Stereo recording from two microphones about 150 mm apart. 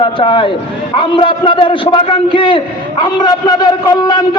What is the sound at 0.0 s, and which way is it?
A man's voice, 35° left (ahead or behind).